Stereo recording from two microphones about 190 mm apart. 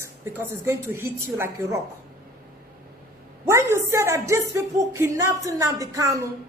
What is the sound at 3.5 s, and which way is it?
A woman's voice, 15° right (ahead or behind).